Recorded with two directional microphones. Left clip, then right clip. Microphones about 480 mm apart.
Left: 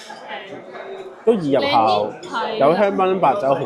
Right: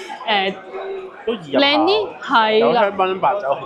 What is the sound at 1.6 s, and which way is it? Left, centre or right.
A woman's voice, right.